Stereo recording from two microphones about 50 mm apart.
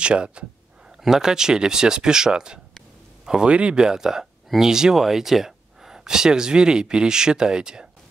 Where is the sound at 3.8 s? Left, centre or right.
Centre.